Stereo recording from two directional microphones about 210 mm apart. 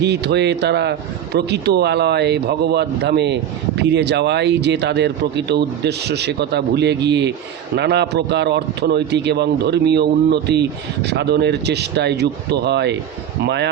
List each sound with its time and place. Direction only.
0.0 s a man's voice: 55° right (ahead or behind)